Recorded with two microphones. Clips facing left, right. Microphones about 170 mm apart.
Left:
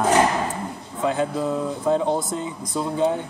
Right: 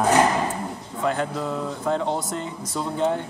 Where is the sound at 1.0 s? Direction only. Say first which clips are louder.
Left 2 dB; 15° left (ahead or behind).